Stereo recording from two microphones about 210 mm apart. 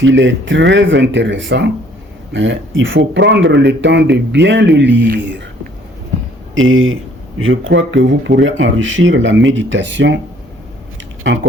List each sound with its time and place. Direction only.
0.0 s speech: 60° right (ahead or behind)
6.5 s speech: 70° right (ahead or behind)